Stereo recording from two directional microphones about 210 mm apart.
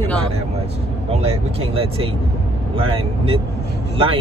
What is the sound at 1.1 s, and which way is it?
Speech, 30° right (ahead or behind).